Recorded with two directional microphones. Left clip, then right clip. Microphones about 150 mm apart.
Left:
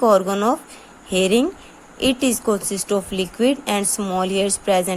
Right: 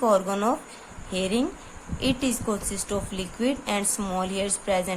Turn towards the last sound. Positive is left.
turn(degrees=45)  # may be behind; listen again after turning